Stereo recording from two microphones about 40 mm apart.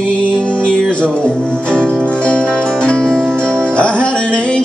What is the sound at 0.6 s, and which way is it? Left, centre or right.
Music, left.